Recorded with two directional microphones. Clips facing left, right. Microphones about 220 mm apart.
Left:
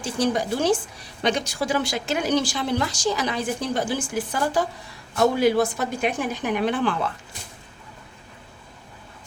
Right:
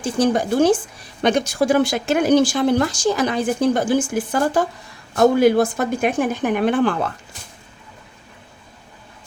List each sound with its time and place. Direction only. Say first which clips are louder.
0.0 s speech: right 5 dB; 50° right (ahead or behind)